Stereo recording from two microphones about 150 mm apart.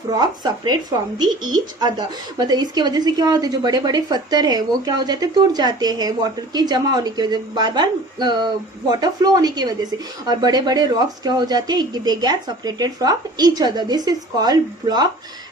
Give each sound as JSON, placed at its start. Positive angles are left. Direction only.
{"t": 0.1, "sound": "speech", "side_deg": -25}